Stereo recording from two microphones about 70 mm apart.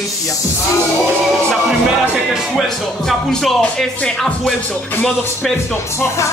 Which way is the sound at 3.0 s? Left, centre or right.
Centre.